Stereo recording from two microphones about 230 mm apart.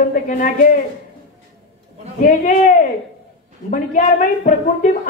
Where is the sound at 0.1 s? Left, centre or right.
Left.